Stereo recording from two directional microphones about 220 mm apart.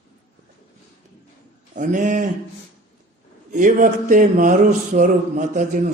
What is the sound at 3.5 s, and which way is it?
Mantra, 35° right (ahead or behind).